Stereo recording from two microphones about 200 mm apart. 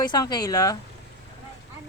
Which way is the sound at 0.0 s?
20° left (ahead or behind).